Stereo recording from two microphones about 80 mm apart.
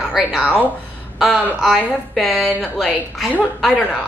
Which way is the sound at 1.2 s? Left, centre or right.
Centre.